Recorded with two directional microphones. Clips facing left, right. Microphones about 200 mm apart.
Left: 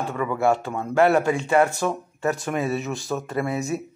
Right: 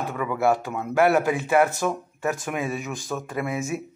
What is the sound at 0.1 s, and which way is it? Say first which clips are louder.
Speech: left 1 dB; 5° right (ahead or behind).